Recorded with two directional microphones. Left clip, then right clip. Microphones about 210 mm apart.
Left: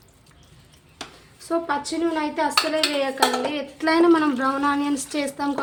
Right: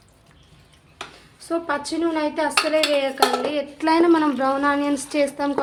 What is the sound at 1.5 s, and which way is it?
A woman's voice, 5° right (ahead or behind).